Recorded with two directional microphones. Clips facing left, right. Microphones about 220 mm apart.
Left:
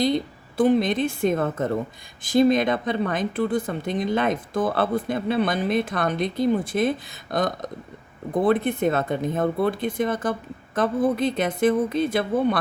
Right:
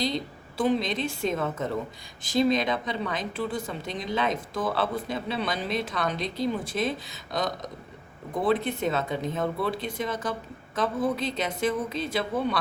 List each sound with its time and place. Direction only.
0.0 s speech: 55° left (ahead or behind)